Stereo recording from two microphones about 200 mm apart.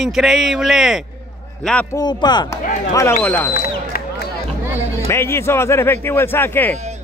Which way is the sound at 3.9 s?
50° left (ahead or behind).